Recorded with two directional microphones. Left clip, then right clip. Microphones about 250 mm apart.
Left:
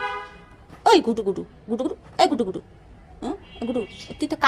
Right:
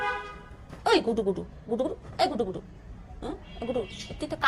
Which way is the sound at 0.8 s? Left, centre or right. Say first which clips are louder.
Left 6 dB; left.